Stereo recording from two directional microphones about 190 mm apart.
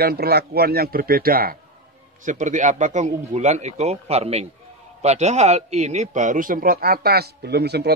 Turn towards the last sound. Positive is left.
turn(degrees=-60)  # may be behind; listen again after turning